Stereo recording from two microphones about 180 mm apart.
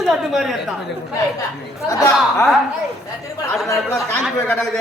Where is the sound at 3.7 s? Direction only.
10° left (ahead or behind).